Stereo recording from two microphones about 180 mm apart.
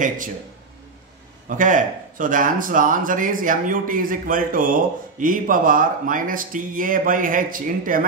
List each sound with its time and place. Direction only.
1.6 s speech: 45° right (ahead or behind)